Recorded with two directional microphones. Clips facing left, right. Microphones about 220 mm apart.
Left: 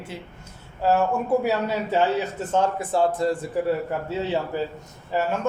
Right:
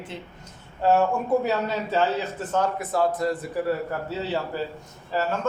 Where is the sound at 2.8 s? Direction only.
30° left (ahead or behind).